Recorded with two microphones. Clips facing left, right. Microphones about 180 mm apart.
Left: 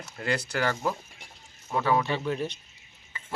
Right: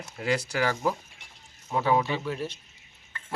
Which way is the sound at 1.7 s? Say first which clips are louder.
Right 1 dB; 20° right (ahead or behind).